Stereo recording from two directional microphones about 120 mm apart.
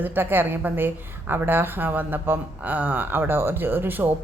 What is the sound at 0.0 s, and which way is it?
A woman's voice, 15° right (ahead or behind).